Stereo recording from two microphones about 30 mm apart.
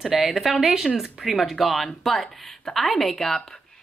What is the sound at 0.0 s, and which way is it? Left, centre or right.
A woman's voice, centre.